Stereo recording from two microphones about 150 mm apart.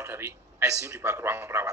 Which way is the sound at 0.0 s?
15° right (ahead or behind).